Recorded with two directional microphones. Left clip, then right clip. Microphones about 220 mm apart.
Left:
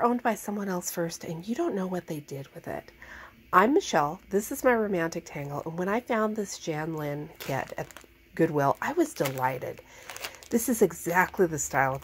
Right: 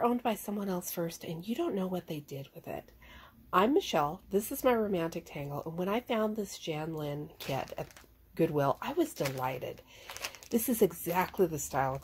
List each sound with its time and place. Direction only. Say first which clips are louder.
0.0 s a woman's voice: left 5 dB; 15° left (ahead or behind)